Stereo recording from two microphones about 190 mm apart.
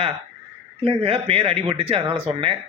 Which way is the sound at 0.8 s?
30° right (ahead or behind).